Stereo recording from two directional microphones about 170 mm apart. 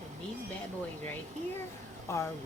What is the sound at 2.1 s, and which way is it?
Speech, 15° left (ahead or behind).